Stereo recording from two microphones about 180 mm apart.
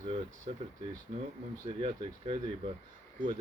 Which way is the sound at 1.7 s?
30° right (ahead or behind).